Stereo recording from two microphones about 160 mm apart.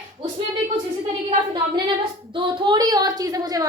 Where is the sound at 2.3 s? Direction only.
30° right (ahead or behind).